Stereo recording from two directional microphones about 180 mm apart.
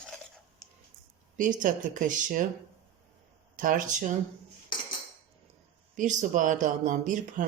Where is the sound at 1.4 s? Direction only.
45° right (ahead or behind).